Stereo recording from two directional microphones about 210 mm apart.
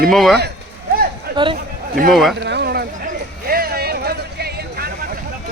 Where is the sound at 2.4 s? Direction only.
50° right (ahead or behind).